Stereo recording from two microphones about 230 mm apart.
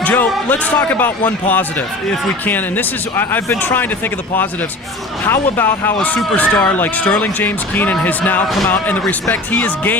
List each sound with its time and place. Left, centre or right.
0.0 s speech: centre
5.2 s speech: centre